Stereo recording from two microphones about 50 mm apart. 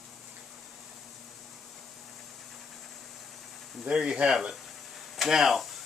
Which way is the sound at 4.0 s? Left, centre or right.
Centre.